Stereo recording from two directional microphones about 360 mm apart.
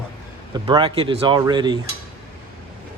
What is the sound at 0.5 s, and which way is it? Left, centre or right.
Speech, centre.